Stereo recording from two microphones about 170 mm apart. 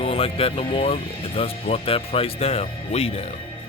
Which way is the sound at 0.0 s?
35° left (ahead or behind).